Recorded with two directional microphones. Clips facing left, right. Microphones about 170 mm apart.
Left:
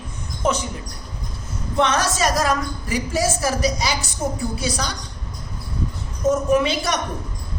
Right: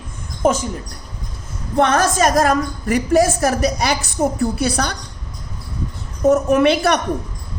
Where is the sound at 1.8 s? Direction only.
50° right (ahead or behind).